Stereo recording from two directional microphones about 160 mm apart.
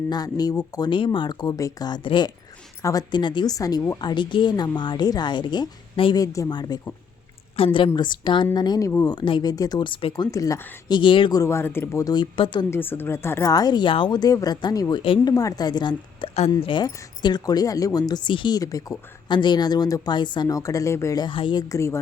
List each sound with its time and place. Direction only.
0.1 s a woman's voice: 25° left (ahead or behind)
10.3 s speech: 20° left (ahead or behind)
12.7 s speech: 15° left (ahead or behind); by 21.6 s 30° left (ahead or behind)
21.7 s speech: 20° left (ahead or behind)